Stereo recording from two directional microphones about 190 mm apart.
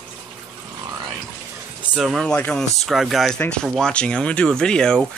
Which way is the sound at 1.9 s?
Centre (ahead or behind).